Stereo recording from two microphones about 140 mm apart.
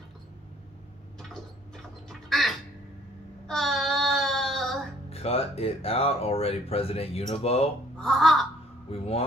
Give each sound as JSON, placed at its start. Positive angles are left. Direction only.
{"t": 1.3, "sound": "a sound", "side_deg": 5}
{"t": 3.4, "sound": "child singing", "side_deg": 0}
{"t": 5.1, "sound": "speech", "side_deg": 45}
{"t": 8.0, "sound": "crow", "side_deg": 0}
{"t": 8.9, "sound": "speech", "side_deg": 45}